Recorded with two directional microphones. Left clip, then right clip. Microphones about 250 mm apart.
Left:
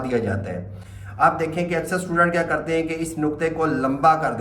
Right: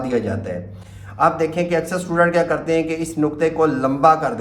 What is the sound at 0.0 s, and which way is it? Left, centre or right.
Speech, centre.